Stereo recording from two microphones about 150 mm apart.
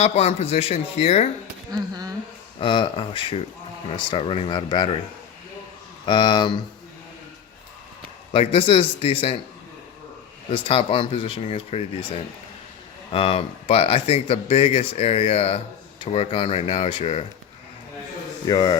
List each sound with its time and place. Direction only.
0.0 s speech: 45° left (ahead or behind)
1.7 s speech: 25° right (ahead or behind)
2.6 s speech: 35° left (ahead or behind)
6.1 s speech: 30° left (ahead or behind)
8.3 s speech: 40° left (ahead or behind)
10.5 s speech: 40° left (ahead or behind)
18.4 s mantra: 30° left (ahead or behind)